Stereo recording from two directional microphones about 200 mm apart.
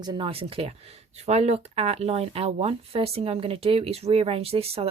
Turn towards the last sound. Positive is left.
turn(degrees=-30)  # may be behind; listen again after turning